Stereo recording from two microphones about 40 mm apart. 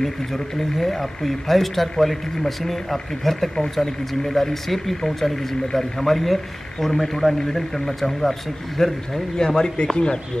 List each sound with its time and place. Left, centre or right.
0.0 s speech: centre; by 10.2 s left